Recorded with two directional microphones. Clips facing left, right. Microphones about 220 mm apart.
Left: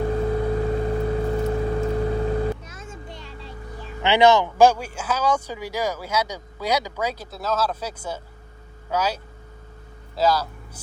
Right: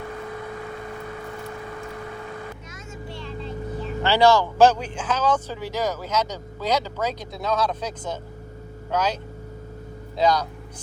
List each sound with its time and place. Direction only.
0.0 s vehicle: 35° left (ahead or behind)
4.0 s speech: 20° left (ahead or behind)
10.2 s speech: 5° left (ahead or behind)